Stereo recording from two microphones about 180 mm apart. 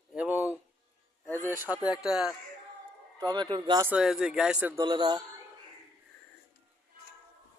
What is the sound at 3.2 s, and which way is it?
Speech, 25° right (ahead or behind).